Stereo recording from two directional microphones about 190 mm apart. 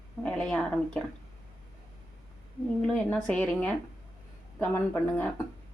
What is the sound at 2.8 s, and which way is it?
Speech, 5° left (ahead or behind).